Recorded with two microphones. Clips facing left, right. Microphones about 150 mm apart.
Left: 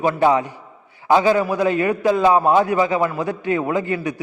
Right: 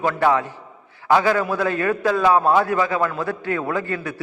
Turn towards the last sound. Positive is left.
turn(degrees=15)  # may be behind; listen again after turning